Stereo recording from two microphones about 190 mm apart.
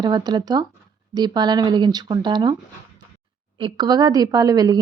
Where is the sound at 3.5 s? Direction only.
25° right (ahead or behind).